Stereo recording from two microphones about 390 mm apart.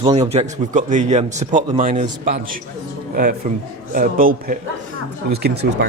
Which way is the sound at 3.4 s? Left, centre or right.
Centre.